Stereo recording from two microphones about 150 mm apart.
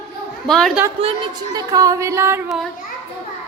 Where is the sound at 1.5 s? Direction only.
25° right (ahead or behind).